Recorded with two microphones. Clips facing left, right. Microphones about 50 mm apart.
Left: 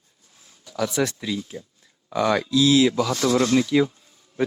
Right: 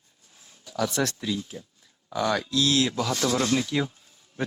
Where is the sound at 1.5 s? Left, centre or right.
Left.